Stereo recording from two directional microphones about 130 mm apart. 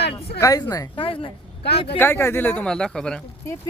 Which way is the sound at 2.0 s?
20° left (ahead or behind).